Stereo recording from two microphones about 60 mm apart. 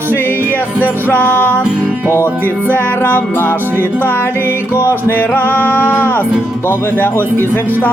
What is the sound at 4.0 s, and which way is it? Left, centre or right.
Music, left.